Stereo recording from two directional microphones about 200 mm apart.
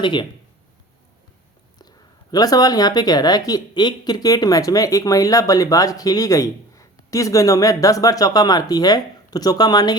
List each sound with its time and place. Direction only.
0.0 s speech: 25° left (ahead or behind)
2.3 s speech: 20° left (ahead or behind)